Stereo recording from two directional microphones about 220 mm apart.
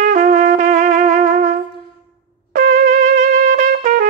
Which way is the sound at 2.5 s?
35° right (ahead or behind).